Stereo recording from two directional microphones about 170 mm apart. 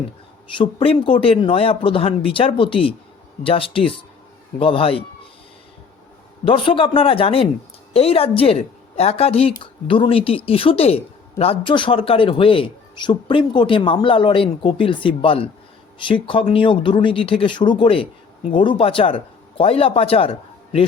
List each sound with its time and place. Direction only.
0.5 s a woman's voice: 30° left (ahead or behind)
6.4 s a woman's voice: 30° left (ahead or behind)